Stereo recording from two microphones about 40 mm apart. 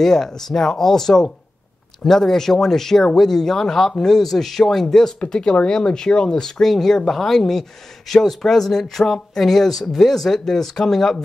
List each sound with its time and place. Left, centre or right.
0.0 s speech: centre
5.2 s speech: centre